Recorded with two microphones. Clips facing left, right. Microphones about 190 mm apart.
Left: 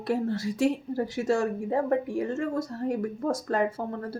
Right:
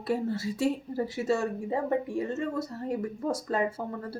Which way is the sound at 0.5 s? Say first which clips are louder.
Left 3 dB; 90° left.